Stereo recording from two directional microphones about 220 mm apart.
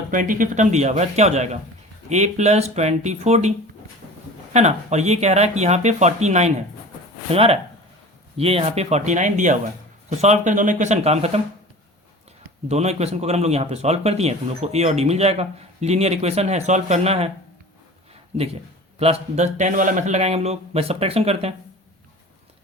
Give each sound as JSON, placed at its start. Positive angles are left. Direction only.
{"t": 0.1, "sound": "speech", "side_deg": -35}
{"t": 4.5, "sound": "speech", "side_deg": -30}
{"t": 12.6, "sound": "speech", "side_deg": -30}
{"t": 18.9, "sound": "speech", "side_deg": -30}